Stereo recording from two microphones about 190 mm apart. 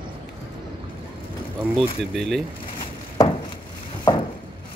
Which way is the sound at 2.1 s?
Centre (ahead or behind).